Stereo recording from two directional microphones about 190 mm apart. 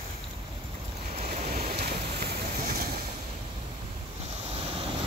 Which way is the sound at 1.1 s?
35° right (ahead or behind).